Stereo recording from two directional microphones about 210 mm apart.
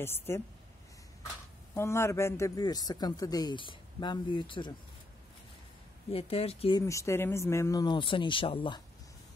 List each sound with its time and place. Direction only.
0.0 s a woman's voice: 10° left (ahead or behind)
1.8 s speech: 10° left (ahead or behind)
6.1 s speech: 30° left (ahead or behind)
6.9 s speech: 15° left (ahead or behind)